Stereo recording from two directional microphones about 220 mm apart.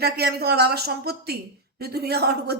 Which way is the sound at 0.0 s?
45° right (ahead or behind).